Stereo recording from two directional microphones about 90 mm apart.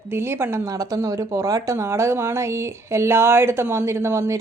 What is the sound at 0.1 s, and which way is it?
Speech, 25° right (ahead or behind).